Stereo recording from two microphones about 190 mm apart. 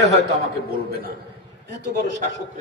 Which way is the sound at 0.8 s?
55° right (ahead or behind).